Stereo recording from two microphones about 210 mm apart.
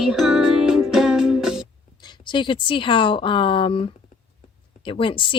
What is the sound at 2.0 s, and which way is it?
Speech, 20° left (ahead or behind).